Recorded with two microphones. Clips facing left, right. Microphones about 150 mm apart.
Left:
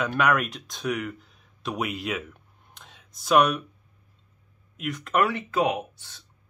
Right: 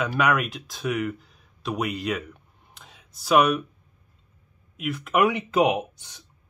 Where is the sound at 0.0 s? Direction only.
Centre (ahead or behind).